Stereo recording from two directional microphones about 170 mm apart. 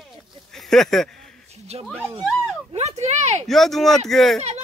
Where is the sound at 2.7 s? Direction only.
40° right (ahead or behind).